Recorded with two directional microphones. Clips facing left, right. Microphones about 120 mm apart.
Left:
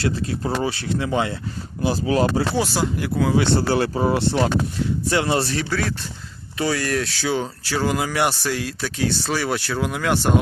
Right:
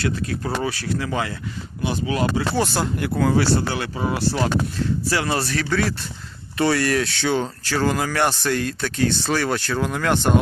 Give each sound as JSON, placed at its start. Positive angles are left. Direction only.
{"t": 0.0, "sound": "speech", "side_deg": 25}
{"t": 2.6, "sound": "speech", "side_deg": 0}
{"t": 3.3, "sound": "speech", "side_deg": 20}
{"t": 3.7, "sound": "speech", "side_deg": 35}
{"t": 5.6, "sound": "speech", "side_deg": 0}